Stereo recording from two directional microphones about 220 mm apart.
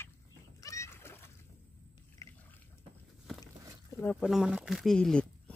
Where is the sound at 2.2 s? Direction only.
10° left (ahead or behind).